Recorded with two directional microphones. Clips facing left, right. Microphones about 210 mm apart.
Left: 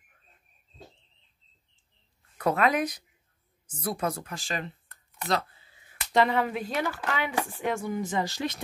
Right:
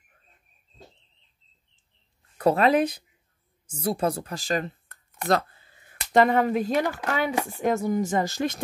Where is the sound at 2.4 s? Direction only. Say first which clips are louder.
Right 5 dB; 30° right (ahead or behind).